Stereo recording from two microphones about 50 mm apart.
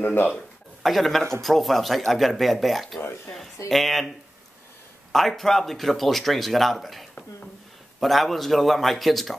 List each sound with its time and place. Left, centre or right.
0.0 s speech: left
0.8 s speech: centre
5.1 s speech: centre